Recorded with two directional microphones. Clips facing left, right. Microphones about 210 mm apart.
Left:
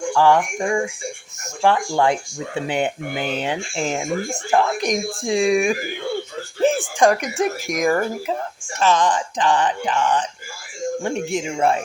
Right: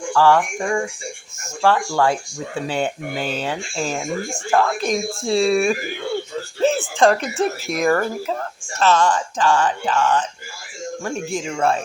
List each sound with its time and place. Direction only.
0.1 s speech: 20° left (ahead or behind)